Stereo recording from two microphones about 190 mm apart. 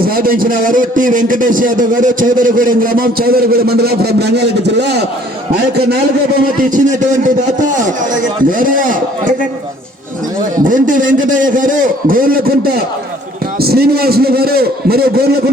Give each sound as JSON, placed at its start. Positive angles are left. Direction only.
{"t": 0.0, "sound": "a man's voice", "side_deg": -50}
{"t": 6.6, "sound": "a man's voice", "side_deg": -45}
{"t": 10.7, "sound": "a man's voice", "side_deg": -45}